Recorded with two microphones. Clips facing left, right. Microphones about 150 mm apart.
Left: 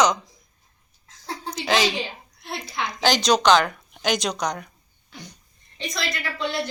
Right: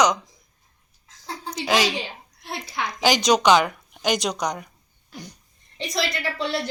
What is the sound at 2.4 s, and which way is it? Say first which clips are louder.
A woman's voice: even; 10° right (ahead or behind).